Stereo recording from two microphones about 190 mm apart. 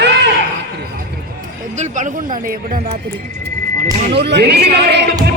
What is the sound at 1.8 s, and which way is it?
Speech, 40° right (ahead or behind).